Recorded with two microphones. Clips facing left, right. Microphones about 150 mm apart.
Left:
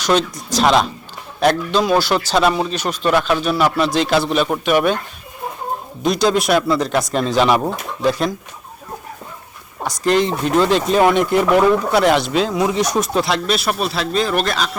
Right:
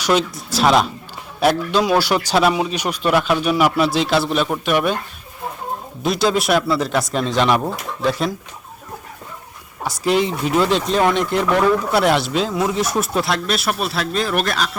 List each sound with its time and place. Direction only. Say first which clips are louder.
0.0 s a man's voice: left 1 dB; 5° right (ahead or behind)
6.0 s speech: left 2 dB; centre (ahead or behind)
9.8 s speech: left 2 dB; 5° right (ahead or behind); by 11.8 s 10° left (ahead or behind)
11.9 s speech: left 2 dB; centre (ahead or behind)